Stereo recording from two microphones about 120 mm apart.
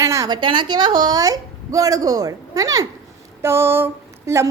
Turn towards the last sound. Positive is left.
turn(degrees=-25)  # may be behind; listen again after turning